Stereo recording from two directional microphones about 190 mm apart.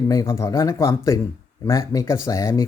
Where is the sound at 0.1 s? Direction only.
15° left (ahead or behind).